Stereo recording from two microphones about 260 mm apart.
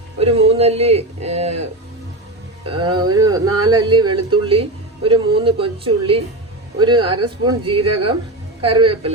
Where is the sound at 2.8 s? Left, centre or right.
Centre.